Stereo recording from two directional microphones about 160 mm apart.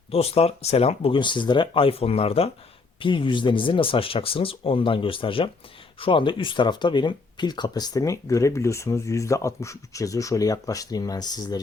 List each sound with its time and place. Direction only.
0.1 s speech: 40° left (ahead or behind)